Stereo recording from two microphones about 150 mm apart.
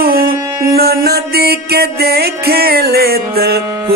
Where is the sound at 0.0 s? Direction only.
90° right.